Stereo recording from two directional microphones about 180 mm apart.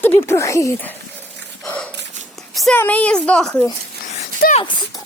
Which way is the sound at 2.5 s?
Centre (ahead or behind).